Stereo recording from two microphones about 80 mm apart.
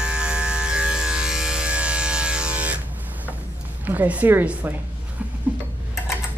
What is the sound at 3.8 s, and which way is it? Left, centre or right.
Speech, right.